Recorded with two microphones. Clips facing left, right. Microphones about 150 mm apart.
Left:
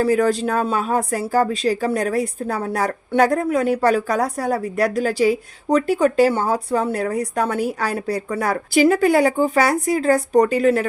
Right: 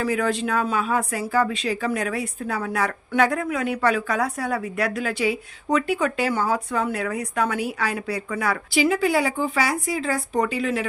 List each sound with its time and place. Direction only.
0.0 s a woman's voice: 40° left (ahead or behind)